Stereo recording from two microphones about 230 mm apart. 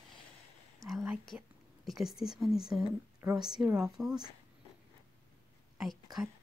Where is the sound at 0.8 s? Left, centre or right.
Centre.